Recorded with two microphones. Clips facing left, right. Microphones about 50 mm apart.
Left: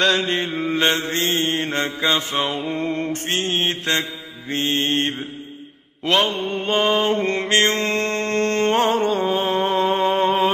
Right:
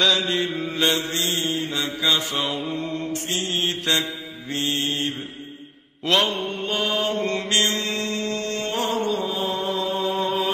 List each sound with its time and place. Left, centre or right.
0.0 s mantra: left
6.7 s music: left